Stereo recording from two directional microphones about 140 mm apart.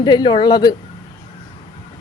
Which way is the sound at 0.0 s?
30° left (ahead or behind).